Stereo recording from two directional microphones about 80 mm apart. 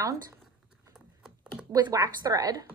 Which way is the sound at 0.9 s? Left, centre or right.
Centre.